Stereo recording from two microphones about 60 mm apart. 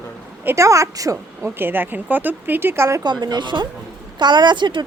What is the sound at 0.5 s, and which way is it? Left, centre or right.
Speech, right.